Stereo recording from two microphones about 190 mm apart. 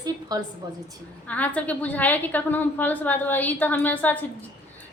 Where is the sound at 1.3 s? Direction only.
10° left (ahead or behind).